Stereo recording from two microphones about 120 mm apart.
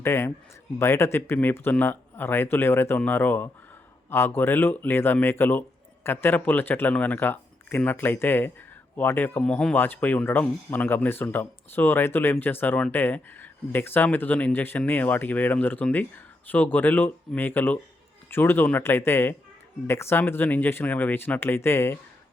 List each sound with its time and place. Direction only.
0.0 s speech: 20° left (ahead or behind)